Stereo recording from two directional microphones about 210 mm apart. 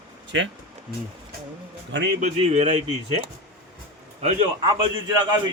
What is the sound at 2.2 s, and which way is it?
Speech, 30° right (ahead or behind).